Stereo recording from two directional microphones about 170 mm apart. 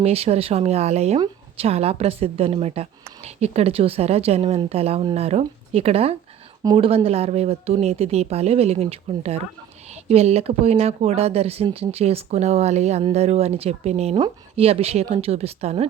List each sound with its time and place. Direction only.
0.0 s speech: 35° right (ahead or behind)